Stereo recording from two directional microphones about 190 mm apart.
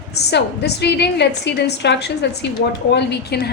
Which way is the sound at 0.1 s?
60° left (ahead or behind).